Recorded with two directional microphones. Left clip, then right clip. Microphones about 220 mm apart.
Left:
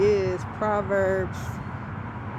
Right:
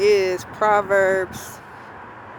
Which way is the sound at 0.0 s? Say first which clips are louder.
Right 5 dB; 25° right (ahead or behind).